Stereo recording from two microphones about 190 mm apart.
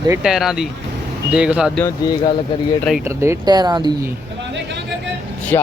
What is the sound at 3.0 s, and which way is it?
Speech, 15° right (ahead or behind).